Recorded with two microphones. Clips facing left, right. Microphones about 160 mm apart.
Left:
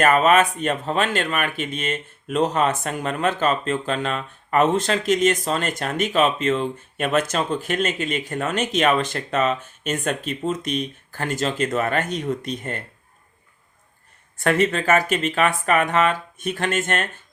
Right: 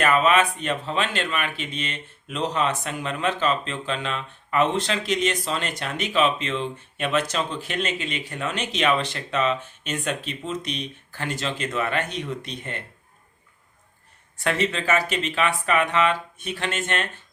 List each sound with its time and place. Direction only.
0.0 s speech: 45° left (ahead or behind)
14.3 s speech: 50° left (ahead or behind)